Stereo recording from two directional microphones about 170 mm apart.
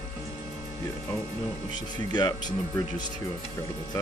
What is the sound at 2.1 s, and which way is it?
Speech, 25° left (ahead or behind).